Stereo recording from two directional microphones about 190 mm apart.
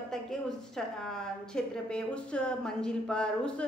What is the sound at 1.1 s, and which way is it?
A woman's voice, 5° left (ahead or behind).